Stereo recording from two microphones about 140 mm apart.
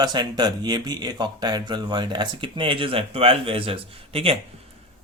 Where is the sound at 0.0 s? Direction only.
30° right (ahead or behind).